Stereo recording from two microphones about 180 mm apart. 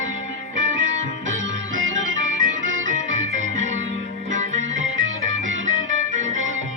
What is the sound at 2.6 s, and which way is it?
Music, 90° right.